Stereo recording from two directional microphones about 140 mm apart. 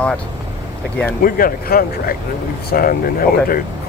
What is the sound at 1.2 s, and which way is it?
Speech, 90° left.